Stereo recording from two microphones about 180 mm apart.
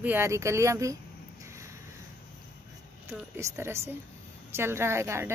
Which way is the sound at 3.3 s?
15° right (ahead or behind).